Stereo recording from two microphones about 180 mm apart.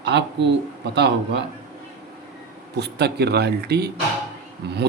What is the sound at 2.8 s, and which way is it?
Speech, 65° right (ahead or behind).